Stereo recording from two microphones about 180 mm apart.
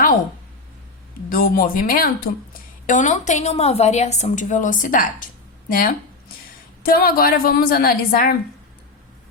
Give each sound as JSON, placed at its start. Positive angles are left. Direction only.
{"t": 1.3, "sound": "a woman's voice", "side_deg": 55}